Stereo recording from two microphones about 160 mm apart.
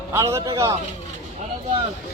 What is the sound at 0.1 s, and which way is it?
Speech, 20° right (ahead or behind).